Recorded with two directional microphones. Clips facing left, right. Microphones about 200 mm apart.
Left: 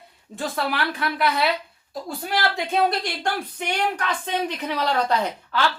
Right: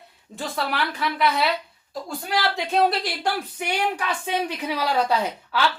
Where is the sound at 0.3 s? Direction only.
Centre (ahead or behind).